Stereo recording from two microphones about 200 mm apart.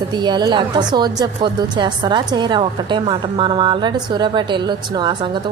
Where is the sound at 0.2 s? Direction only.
20° right (ahead or behind).